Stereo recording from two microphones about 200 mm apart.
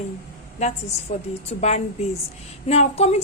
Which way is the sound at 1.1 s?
45° left (ahead or behind).